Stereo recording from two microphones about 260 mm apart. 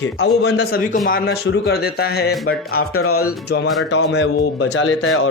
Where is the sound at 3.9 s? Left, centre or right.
Left.